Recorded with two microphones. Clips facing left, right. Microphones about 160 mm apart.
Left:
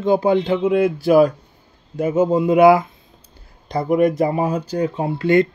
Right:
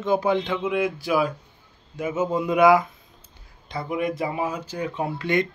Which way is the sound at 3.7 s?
45° left (ahead or behind).